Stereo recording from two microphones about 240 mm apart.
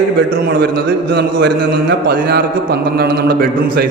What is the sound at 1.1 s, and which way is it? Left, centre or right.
A man's voice, right.